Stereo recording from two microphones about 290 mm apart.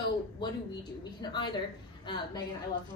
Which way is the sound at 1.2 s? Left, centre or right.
Centre.